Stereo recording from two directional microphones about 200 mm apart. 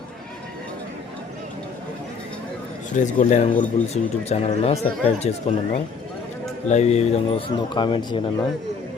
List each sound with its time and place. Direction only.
3.0 s a man's voice: 40° left (ahead or behind)